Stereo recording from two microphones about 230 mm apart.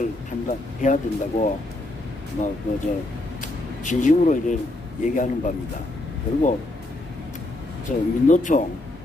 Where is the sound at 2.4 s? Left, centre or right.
Left.